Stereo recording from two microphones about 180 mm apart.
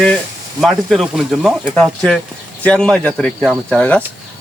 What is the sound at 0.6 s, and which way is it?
Speech, centre (ahead or behind).